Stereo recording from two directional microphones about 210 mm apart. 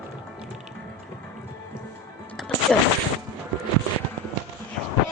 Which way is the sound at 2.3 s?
5° left (ahead or behind).